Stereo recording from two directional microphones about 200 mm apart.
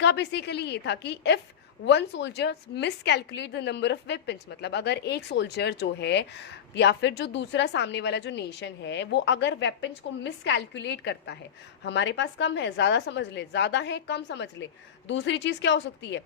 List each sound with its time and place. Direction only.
0.0 s a woman's voice: 60° left (ahead or behind)